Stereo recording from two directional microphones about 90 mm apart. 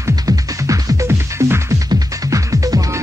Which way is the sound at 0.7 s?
30° right (ahead or behind).